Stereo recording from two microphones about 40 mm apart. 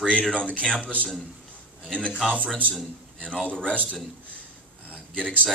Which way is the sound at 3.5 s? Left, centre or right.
Left.